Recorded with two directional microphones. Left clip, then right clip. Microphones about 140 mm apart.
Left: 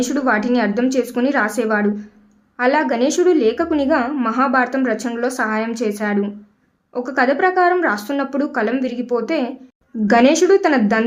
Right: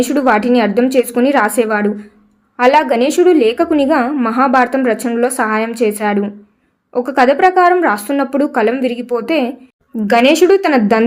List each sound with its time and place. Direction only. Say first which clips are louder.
0.0 s a woman's voice: right 6 dB; 15° right (ahead or behind)